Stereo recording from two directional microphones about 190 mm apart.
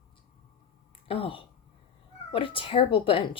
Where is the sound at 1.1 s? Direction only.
30° left (ahead or behind).